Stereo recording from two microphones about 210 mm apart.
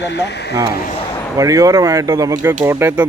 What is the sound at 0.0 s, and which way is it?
Speech, 55° left (ahead or behind).